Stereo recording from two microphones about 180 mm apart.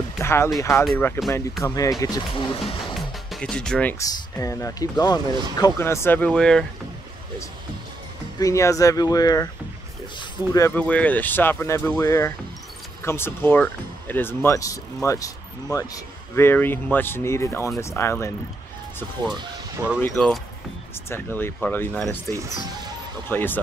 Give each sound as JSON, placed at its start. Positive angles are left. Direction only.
{"t": 0.2, "sound": "speech", "side_deg": 15}
{"t": 3.3, "sound": "speech", "side_deg": 5}
{"t": 4.0, "sound": "speech", "side_deg": 15}
{"t": 8.4, "sound": "speech", "side_deg": 15}
{"t": 10.5, "sound": "speech", "side_deg": 15}
{"t": 20.0, "sound": "speech", "side_deg": 5}